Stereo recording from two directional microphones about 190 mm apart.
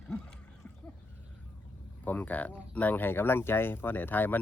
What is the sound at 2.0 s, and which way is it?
Speech, 10° left (ahead or behind).